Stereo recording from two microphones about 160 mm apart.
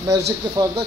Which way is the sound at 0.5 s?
20° right (ahead or behind).